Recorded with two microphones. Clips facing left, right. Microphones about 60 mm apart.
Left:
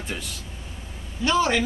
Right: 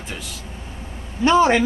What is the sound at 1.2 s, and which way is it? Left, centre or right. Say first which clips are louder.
Speech: right 6 dB; right.